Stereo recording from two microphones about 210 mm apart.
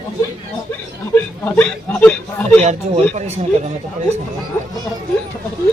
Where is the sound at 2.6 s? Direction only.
30° right (ahead or behind).